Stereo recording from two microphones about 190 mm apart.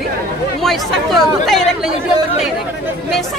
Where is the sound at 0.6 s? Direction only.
Centre (ahead or behind).